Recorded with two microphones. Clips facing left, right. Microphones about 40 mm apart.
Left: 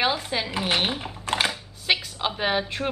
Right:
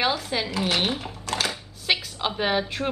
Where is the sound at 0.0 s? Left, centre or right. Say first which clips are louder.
Even; centre.